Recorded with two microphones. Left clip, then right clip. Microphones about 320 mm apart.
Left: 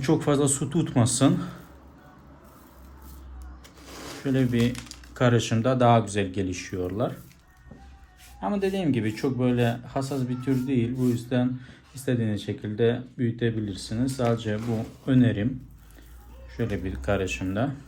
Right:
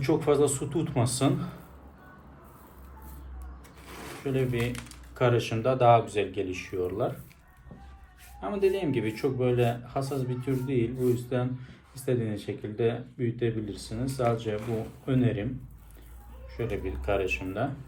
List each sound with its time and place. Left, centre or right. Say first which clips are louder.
0.0 s speech: even; left
4.2 s speech: left 4 dB; left
8.4 s speech: even; left
16.6 s speech: left 2 dB; left